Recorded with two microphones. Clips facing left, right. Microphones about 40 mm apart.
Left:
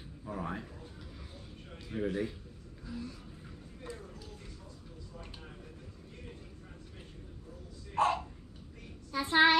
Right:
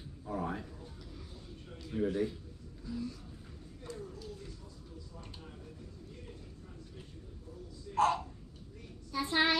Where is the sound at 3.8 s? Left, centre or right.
Centre.